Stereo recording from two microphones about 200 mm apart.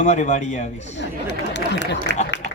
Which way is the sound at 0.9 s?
60° left (ahead or behind).